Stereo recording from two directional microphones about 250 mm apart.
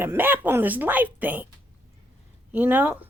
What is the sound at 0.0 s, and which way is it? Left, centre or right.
Speech, centre.